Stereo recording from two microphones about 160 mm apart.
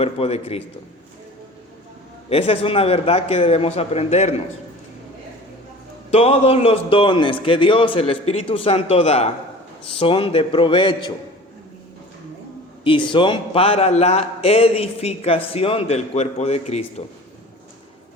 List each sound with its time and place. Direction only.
0.0 s a man's voice: 40° left (ahead or behind)
2.3 s a man's voice: 35° left (ahead or behind)
6.1 s a man's voice: 40° left (ahead or behind)
12.8 s a man's voice: 30° left (ahead or behind)